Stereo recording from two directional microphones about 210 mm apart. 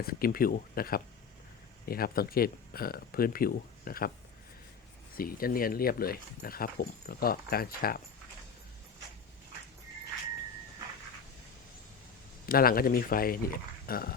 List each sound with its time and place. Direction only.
0.0 s speech: 45° left (ahead or behind)
5.1 s speech: 45° left (ahead or behind)
12.5 s speech: 45° left (ahead or behind)